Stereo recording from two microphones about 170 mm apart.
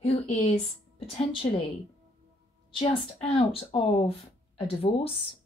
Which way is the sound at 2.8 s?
30° left (ahead or behind).